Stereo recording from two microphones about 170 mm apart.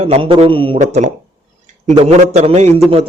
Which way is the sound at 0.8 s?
45° right (ahead or behind).